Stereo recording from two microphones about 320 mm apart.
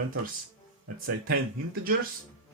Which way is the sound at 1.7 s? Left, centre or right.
Right.